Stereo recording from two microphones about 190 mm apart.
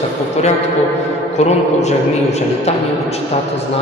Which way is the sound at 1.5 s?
35° left (ahead or behind).